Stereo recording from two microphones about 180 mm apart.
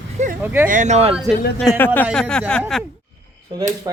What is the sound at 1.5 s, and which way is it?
Speech, 10° left (ahead or behind).